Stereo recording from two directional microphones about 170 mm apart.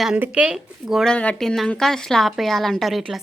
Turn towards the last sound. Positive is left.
turn(degrees=0)  # may be behind; listen again after turning